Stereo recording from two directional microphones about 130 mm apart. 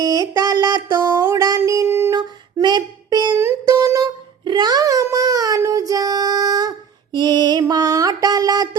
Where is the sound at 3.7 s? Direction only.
25° right (ahead or behind).